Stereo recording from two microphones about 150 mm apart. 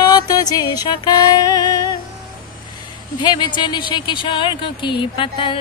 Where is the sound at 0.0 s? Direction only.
25° left (ahead or behind).